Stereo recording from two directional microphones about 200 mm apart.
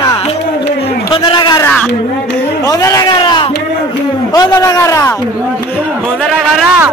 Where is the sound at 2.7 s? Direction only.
15° left (ahead or behind).